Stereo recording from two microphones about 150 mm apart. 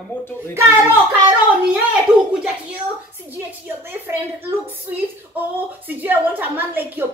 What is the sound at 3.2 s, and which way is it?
A woman's voice, 15° right (ahead or behind).